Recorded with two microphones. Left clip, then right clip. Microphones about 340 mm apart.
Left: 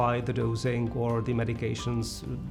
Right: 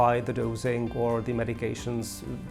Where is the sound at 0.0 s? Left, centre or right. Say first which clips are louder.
Right 4 dB; right.